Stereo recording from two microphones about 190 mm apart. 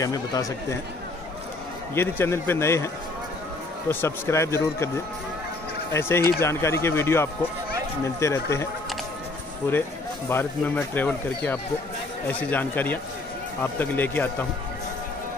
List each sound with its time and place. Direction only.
0.0 s speech: 20° left (ahead or behind)
2.0 s speech: 15° left (ahead or behind)
3.9 s speech: 15° left (ahead or behind)
9.7 s speech: 10° left (ahead or behind)